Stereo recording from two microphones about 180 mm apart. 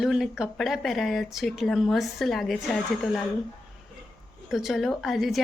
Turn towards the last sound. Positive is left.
turn(degrees=0)  # may be behind; listen again after turning